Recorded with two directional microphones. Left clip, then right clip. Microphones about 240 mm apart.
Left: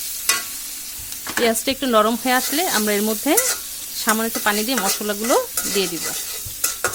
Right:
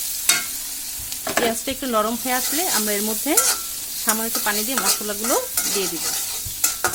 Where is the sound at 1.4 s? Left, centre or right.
Left.